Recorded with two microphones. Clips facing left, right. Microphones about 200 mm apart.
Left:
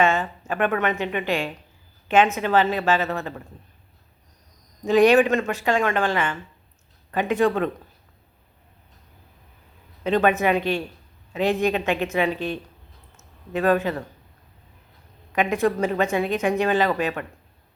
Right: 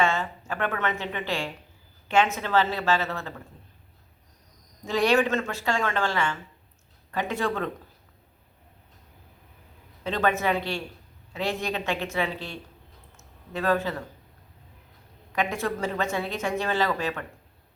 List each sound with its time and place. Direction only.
0.0 s speech: 20° left (ahead or behind)
4.9 s speech: 20° left (ahead or behind)
10.0 s speech: 15° left (ahead or behind)
15.3 s speech: 20° left (ahead or behind)